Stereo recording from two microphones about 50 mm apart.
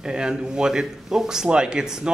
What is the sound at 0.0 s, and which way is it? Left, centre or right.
Speech, centre.